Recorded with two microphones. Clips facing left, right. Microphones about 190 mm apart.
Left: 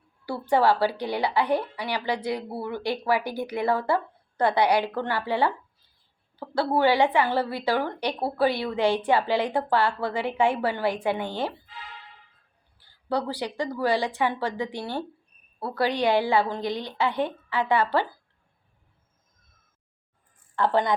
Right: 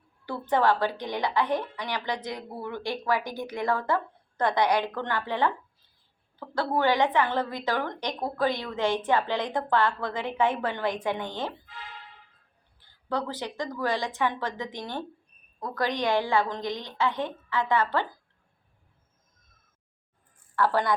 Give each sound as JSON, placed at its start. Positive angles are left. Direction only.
{"t": 0.3, "sound": "a woman's voice", "side_deg": 10}
{"t": 6.5, "sound": "a woman's voice", "side_deg": 10}
{"t": 13.1, "sound": "a woman's voice", "side_deg": 10}
{"t": 20.6, "sound": "speech", "side_deg": 20}